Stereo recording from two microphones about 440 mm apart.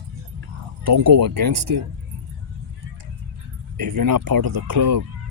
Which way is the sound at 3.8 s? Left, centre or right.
Right.